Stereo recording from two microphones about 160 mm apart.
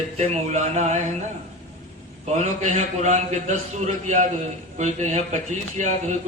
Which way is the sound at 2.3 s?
50° right (ahead or behind).